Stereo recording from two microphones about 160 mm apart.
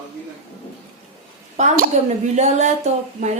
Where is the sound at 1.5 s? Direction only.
45° right (ahead or behind).